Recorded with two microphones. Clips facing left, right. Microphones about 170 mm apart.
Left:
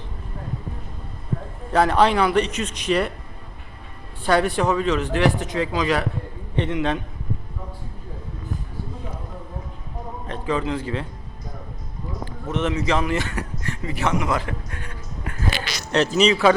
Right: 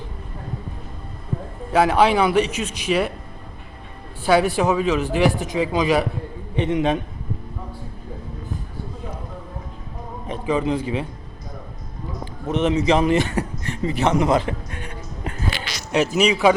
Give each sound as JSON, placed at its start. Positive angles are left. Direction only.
{"t": 1.7, "sound": "a man's voice", "side_deg": -5}
{"t": 4.3, "sound": "speech", "side_deg": -5}
{"t": 10.2, "sound": "speech", "side_deg": -10}
{"t": 12.2, "sound": "a man's voice", "side_deg": -15}
{"t": 15.9, "sound": "speech", "side_deg": -10}